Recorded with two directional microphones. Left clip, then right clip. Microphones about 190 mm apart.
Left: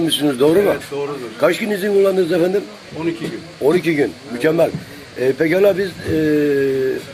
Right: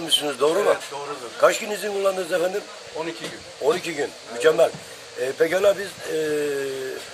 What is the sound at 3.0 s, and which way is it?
Speech, 20° right (ahead or behind).